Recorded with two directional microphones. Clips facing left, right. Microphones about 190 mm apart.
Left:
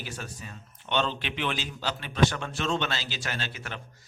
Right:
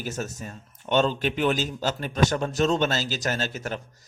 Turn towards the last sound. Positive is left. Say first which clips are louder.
# right 8 dB
turn(degrees=-40)  # may be behind; listen again after turning